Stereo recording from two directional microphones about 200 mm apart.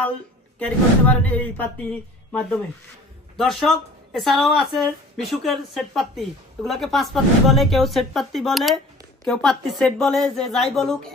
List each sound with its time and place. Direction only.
0.6 s speech: 10° left (ahead or behind)